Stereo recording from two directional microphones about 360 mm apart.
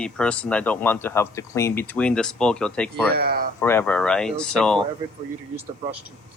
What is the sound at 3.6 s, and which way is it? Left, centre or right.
Speech, centre.